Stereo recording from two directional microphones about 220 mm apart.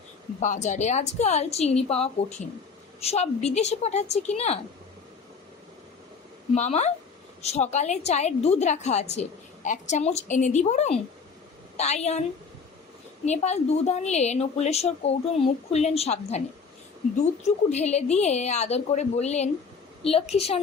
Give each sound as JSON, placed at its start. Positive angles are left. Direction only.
{"t": 0.3, "sound": "speech", "side_deg": 35}
{"t": 6.5, "sound": "a woman's voice", "side_deg": 30}
{"t": 13.2, "sound": "speech", "side_deg": 30}
{"t": 17.7, "sound": "a woman's voice", "side_deg": 30}